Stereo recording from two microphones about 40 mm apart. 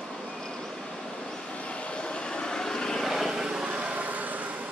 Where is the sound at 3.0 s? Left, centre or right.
Centre.